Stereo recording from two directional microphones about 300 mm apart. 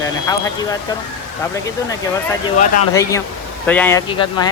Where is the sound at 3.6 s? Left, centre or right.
Centre.